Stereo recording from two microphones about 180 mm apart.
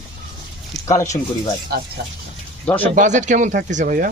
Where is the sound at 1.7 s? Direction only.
65° right (ahead or behind).